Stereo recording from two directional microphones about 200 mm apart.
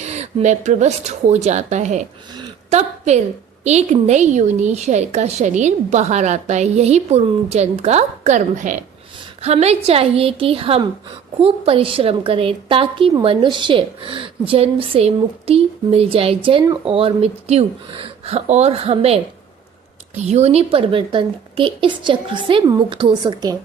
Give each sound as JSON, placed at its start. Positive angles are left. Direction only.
{"t": 0.0, "sound": "a woman's voice", "side_deg": -35}